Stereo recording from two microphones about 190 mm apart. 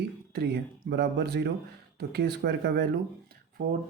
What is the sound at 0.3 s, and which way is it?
Speech, 55° right (ahead or behind).